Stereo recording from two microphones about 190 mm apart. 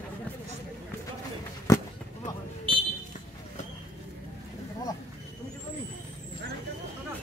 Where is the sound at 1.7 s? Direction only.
20° left (ahead or behind).